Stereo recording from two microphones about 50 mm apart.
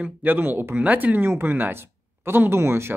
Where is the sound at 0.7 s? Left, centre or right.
Right.